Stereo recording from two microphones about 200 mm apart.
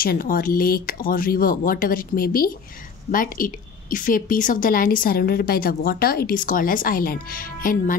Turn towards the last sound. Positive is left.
turn(degrees=45)  # may be behind; listen again after turning